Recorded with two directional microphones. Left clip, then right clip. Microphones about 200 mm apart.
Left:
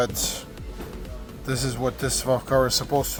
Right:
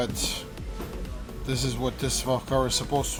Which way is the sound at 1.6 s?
15° left (ahead or behind).